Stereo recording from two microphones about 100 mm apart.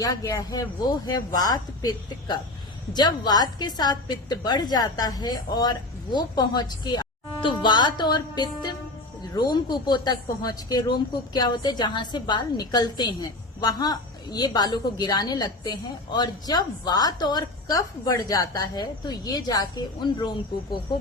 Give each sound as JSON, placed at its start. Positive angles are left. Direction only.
{"t": 0.0, "sound": "a woman's voice", "side_deg": 35}